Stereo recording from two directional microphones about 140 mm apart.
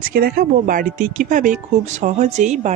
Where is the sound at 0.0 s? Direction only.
90° right.